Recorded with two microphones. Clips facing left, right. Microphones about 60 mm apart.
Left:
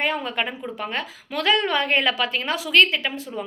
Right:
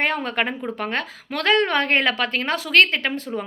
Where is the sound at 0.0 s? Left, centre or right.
Right.